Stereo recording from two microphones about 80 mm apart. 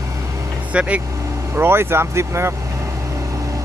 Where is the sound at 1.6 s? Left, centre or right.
Right.